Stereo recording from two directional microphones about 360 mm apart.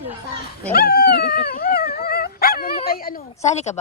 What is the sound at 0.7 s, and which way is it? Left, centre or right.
Dog, left.